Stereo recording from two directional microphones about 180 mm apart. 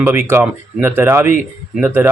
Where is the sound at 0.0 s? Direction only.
10° right (ahead or behind).